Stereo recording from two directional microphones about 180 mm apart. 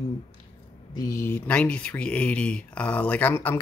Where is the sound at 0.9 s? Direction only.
15° left (ahead or behind).